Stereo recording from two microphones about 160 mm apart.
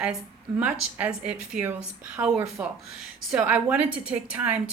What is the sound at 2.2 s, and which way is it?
Speech, 20° right (ahead or behind).